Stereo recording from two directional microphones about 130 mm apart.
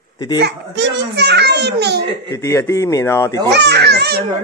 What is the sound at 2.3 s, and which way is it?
Speech, 25° left (ahead or behind).